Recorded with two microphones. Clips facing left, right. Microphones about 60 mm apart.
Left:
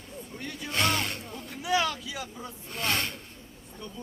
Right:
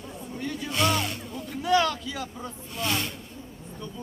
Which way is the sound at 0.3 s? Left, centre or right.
Centre.